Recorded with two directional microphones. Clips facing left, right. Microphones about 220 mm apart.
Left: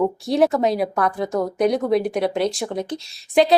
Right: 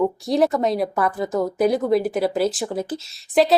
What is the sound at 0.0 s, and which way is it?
A woman's voice, centre (ahead or behind).